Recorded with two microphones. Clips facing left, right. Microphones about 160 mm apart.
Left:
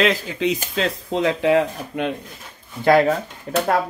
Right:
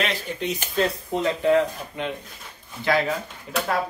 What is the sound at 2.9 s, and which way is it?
Speech, 50° left (ahead or behind).